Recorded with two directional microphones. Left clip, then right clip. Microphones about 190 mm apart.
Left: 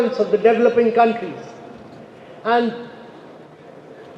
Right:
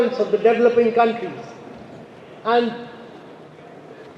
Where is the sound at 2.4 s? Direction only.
40° left (ahead or behind).